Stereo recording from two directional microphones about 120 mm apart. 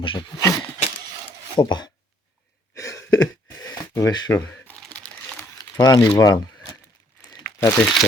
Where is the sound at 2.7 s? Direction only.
25° left (ahead or behind).